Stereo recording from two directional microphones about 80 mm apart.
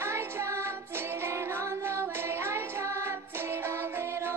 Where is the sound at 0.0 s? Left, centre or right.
Right.